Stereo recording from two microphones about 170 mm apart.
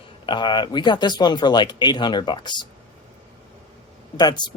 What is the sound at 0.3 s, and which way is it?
Speech, 25° left (ahead or behind).